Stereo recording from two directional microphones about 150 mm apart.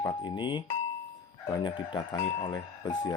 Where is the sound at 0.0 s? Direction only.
25° left (ahead or behind).